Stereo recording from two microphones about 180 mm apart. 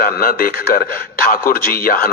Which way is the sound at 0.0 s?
55° left (ahead or behind).